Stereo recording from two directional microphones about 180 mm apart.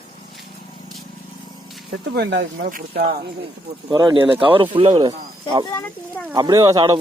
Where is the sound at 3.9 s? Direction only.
25° right (ahead or behind).